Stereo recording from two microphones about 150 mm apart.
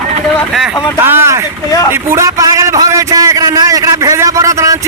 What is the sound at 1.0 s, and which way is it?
Speech, 15° right (ahead or behind).